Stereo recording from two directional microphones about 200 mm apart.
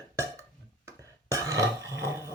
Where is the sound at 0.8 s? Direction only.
15° right (ahead or behind).